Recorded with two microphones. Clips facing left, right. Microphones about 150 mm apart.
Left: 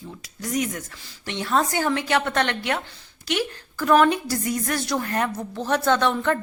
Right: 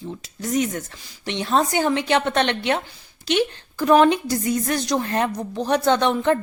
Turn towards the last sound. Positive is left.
turn(degrees=-20)  # may be behind; listen again after turning